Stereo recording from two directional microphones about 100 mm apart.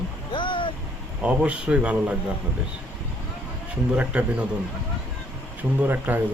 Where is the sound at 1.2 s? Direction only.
10° right (ahead or behind).